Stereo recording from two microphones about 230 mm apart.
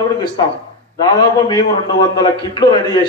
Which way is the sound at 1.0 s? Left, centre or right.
Centre.